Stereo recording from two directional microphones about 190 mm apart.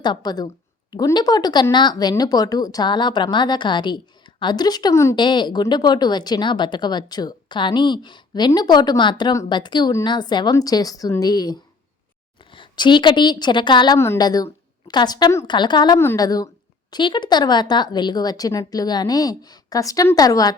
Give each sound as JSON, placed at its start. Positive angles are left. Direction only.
{"t": 0.0, "sound": "speech", "side_deg": 20}
{"t": 12.5, "sound": "speech", "side_deg": 25}